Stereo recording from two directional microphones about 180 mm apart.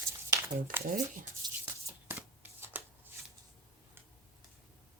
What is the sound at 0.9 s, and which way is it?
Speech, 50° right (ahead or behind).